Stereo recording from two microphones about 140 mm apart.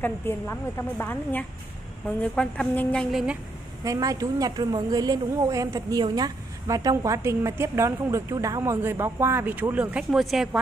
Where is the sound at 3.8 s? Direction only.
25° right (ahead or behind).